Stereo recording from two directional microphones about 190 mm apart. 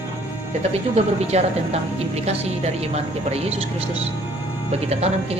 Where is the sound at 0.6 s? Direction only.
35° right (ahead or behind).